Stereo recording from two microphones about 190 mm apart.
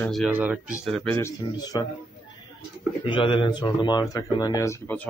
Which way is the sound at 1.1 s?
15° left (ahead or behind).